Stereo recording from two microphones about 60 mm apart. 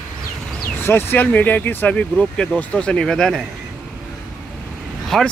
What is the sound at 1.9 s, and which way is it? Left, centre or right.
Speech, centre.